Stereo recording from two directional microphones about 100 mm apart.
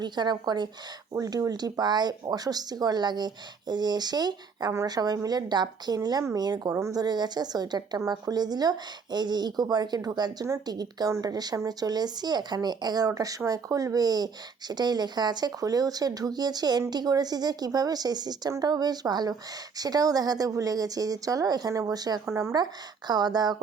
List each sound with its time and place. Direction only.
0.0 s a woman's voice: 45° right (ahead or behind)